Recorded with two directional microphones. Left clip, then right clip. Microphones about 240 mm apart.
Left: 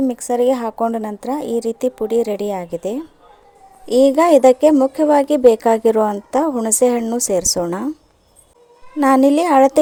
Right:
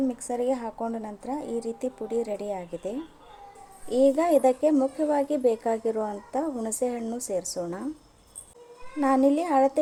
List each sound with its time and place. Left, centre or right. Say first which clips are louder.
0.0 s a woman's voice: left 11 dB; left
9.0 s a woman's voice: left 10 dB; left